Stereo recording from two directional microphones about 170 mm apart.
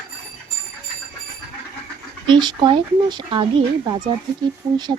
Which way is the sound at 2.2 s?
25° right (ahead or behind).